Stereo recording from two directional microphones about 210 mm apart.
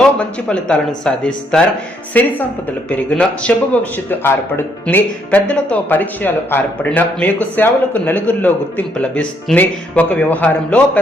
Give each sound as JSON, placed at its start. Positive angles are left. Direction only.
{"t": 0.0, "sound": "speech", "side_deg": 5}